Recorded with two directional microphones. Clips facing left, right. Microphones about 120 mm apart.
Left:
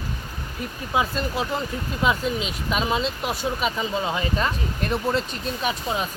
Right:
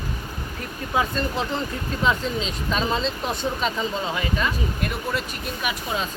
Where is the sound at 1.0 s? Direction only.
10° left (ahead or behind).